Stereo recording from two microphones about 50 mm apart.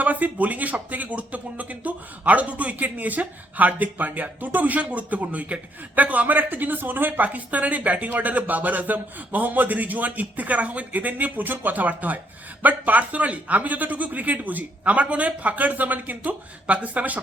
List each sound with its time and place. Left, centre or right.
0.0 s speech: right